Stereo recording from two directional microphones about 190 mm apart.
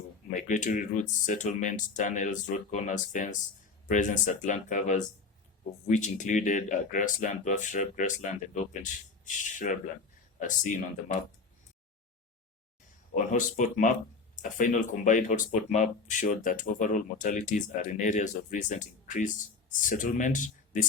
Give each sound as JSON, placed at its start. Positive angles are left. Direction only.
{"t": 0.3, "sound": "speech", "side_deg": 45}
{"t": 13.1, "sound": "speech", "side_deg": 40}